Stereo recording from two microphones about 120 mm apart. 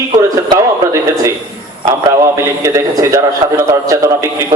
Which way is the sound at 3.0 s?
25° right (ahead or behind).